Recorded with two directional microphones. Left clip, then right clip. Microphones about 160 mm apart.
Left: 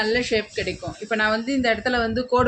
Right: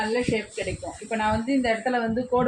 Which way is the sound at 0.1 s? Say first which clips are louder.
Left 4 dB; 45° left (ahead or behind).